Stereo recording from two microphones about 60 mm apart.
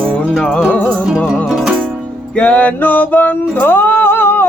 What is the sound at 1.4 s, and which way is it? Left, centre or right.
Music, centre.